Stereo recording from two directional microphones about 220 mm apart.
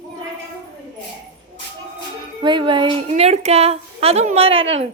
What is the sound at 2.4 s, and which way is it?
A woman's voice, 20° right (ahead or behind).